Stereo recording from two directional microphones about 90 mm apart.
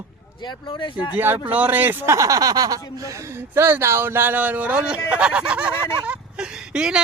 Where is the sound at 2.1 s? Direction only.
40° right (ahead or behind).